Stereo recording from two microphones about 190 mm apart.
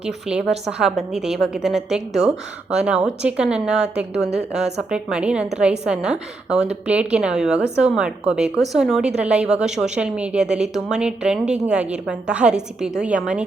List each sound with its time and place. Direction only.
0.0 s a woman's voice: 5° right (ahead or behind)